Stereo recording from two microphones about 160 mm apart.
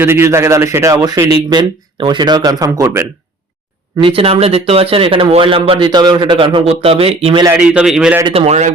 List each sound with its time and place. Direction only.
0.0 s a man's voice: 15° right (ahead or behind)
4.0 s speech: 35° right (ahead or behind)
7.4 s a man's voice: 10° right (ahead or behind)
8.3 s speech: 40° right (ahead or behind)